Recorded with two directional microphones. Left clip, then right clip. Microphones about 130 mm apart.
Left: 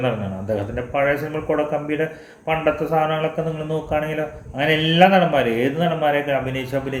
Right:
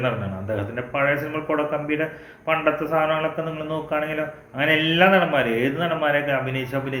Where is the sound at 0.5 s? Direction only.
30° left (ahead or behind).